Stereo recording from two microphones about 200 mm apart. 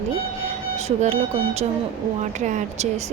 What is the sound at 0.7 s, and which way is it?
Speech, 30° right (ahead or behind).